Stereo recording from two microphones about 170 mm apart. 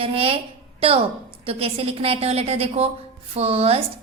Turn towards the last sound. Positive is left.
turn(degrees=-35)  # may be behind; listen again after turning